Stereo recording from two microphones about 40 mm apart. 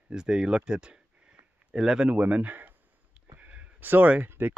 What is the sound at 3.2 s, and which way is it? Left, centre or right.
Sniff, right.